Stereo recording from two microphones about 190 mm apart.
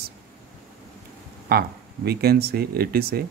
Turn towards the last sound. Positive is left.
turn(degrees=-55)  # may be behind; listen again after turning